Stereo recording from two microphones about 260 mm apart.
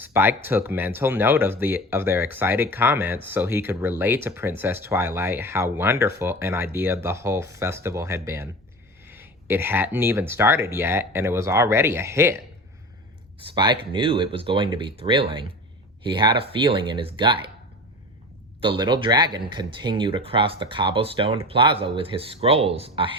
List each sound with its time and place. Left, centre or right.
0.0 s speech: centre
13.5 s speech: centre
18.6 s speech: centre